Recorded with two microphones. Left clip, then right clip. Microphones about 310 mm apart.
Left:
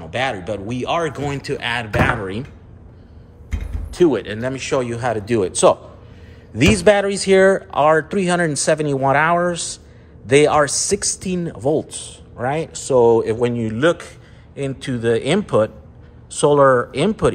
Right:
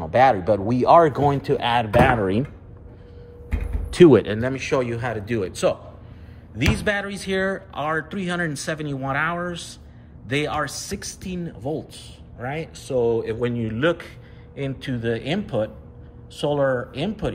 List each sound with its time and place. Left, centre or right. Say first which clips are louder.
0.0 s speech: right 6 dB; centre
4.0 s speech: right 3 dB; centre
4.3 s speech: left 2 dB; centre